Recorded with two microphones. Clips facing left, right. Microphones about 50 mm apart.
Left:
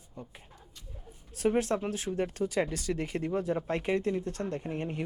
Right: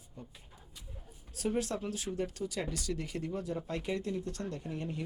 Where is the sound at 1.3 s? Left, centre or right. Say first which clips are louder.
Left 6 dB; left.